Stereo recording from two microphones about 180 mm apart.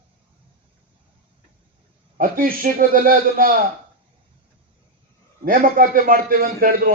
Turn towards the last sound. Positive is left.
turn(degrees=-55)  # may be behind; listen again after turning